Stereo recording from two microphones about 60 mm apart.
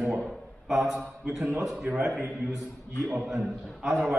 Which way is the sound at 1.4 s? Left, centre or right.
Right.